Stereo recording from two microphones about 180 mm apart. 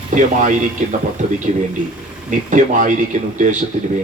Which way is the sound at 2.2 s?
45° right (ahead or behind).